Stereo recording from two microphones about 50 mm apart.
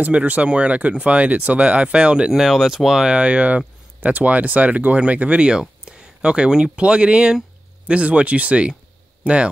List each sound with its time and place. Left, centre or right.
0.1 s speech: right
2.4 s speech: centre
3.1 s speech: right